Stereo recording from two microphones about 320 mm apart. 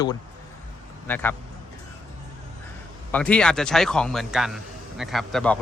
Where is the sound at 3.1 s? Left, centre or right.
Centre.